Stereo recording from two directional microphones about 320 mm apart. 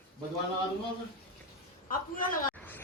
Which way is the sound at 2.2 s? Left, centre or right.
Left.